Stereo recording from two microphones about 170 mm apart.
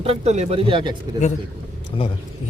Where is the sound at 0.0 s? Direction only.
40° right (ahead or behind).